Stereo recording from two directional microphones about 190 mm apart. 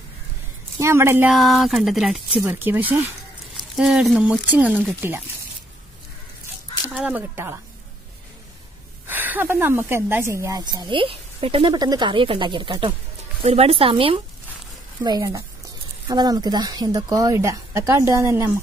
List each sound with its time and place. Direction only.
0.7 s speech: 15° right (ahead or behind)
1.3 s speech: centre (ahead or behind)
6.9 s speech: 5° right (ahead or behind)
9.0 s a woman's voice: 10° right (ahead or behind); by 14.2 s 30° right (ahead or behind)
15.0 s a woman's voice: 20° right (ahead or behind)